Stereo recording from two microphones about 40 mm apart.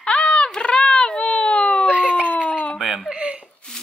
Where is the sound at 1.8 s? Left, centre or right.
Right.